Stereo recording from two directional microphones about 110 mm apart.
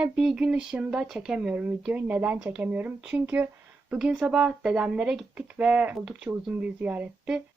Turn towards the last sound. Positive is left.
turn(degrees=-10)  # may be behind; listen again after turning